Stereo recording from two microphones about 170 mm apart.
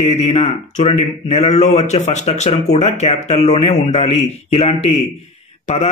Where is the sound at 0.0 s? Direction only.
40° left (ahead or behind).